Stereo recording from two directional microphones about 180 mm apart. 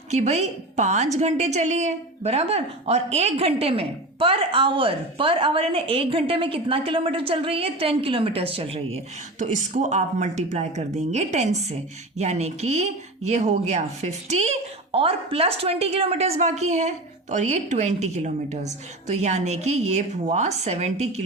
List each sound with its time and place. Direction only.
0.1 s a woman's voice: 40° right (ahead or behind)